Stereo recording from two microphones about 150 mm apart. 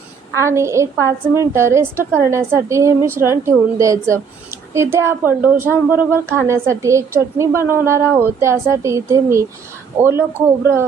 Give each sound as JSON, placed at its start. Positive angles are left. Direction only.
{"t": 0.3, "sound": "a woman's voice", "side_deg": -20}